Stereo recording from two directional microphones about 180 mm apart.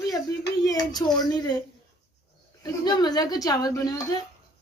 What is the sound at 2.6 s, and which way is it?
A woman's voice, 25° left (ahead or behind).